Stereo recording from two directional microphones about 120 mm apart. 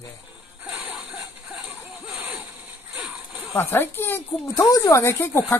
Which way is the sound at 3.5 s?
20° left (ahead or behind).